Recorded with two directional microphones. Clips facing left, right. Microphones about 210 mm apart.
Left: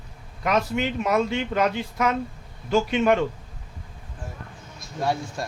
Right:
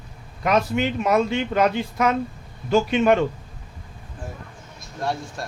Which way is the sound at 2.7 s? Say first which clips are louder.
Right 2 dB; 60° right (ahead or behind).